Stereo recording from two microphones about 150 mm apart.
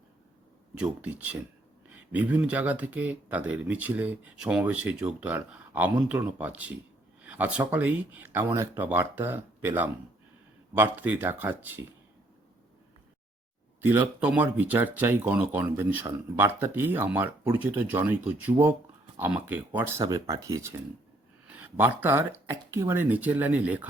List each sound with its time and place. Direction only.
0.8 s speech: 10° right (ahead or behind)
13.8 s speech: 15° right (ahead or behind)